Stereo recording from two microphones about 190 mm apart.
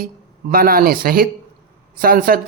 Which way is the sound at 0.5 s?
50° right (ahead or behind).